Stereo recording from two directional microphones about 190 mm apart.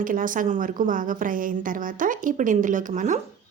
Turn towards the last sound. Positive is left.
turn(degrees=-40)  # may be behind; listen again after turning